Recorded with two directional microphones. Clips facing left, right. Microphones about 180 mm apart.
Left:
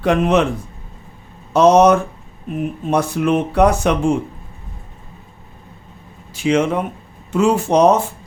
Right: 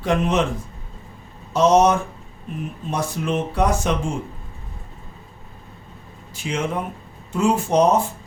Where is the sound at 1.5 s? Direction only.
65° left (ahead or behind).